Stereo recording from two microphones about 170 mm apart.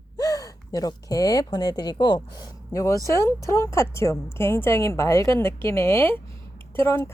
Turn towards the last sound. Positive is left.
turn(degrees=15)  # may be behind; listen again after turning